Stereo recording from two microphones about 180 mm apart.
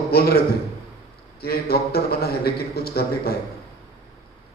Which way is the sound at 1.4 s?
60° left (ahead or behind).